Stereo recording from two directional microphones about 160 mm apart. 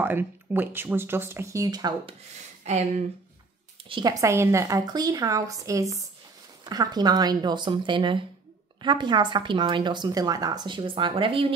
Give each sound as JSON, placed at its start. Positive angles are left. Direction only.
{"t": 0.0, "sound": "speech", "side_deg": -10}
{"t": 2.6, "sound": "speech", "side_deg": -45}
{"t": 3.9, "sound": "a woman's voice", "side_deg": -25}